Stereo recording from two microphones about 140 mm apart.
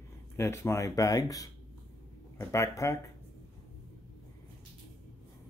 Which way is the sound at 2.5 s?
20° left (ahead or behind).